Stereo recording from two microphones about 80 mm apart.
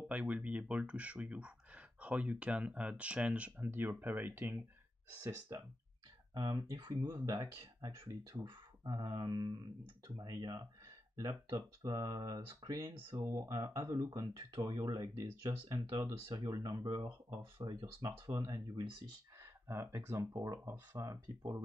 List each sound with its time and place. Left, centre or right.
0.1 s speech: centre
5.2 s speech: right
6.3 s speech: right
7.0 s speech: right
8.5 s a sound: right
10.0 s speech: right
11.1 s speech: right
11.8 s speech: right
15.9 s speech: right
19.4 s speech: right
20.2 s speech: right
21.4 s speech: right